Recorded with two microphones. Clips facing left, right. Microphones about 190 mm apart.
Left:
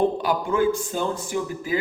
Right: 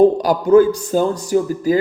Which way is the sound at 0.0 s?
40° right (ahead or behind).